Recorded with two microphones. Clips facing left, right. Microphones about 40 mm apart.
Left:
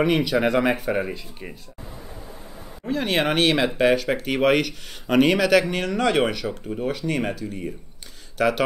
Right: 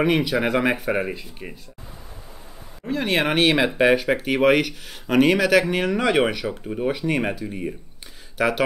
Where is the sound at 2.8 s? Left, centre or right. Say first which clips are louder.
Even; centre.